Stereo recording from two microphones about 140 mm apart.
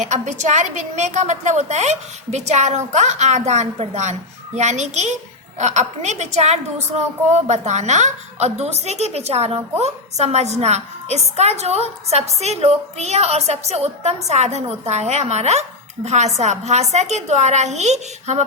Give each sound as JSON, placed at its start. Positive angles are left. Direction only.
{"t": 0.0, "sound": "a woman's voice", "side_deg": -60}